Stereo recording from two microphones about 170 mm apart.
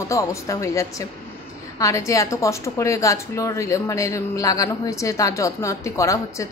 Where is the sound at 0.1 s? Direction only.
20° left (ahead or behind).